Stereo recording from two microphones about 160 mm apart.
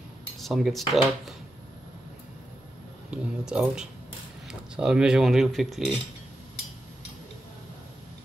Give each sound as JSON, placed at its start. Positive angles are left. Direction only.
{"t": 0.4, "sound": "speech", "side_deg": 0}
{"t": 3.1, "sound": "speech", "side_deg": -5}